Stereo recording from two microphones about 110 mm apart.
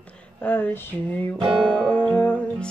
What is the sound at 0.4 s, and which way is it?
Speech, 15° left (ahead or behind).